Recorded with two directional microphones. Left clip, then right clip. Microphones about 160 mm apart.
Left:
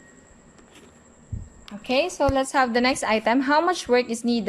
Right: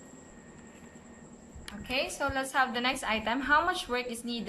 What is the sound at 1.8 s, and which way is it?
A woman's voice, 45° left (ahead or behind).